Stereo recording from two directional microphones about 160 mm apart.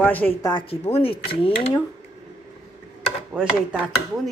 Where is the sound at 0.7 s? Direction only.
40° left (ahead or behind).